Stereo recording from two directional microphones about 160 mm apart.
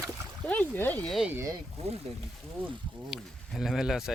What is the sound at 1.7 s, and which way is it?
Speech, 40° right (ahead or behind).